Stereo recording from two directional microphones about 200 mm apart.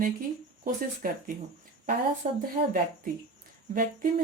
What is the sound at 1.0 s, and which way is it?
Speech, 45° right (ahead or behind).